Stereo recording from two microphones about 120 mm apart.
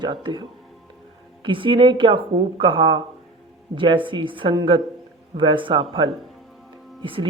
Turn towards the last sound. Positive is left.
turn(degrees=-45)  # may be behind; listen again after turning